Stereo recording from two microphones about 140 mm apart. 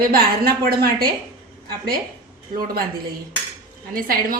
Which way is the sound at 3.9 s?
90° right.